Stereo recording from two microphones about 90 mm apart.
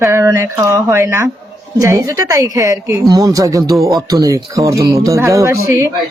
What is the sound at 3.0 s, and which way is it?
Speech, 45° right (ahead or behind).